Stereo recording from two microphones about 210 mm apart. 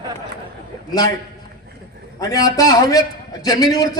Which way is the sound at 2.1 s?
15° left (ahead or behind).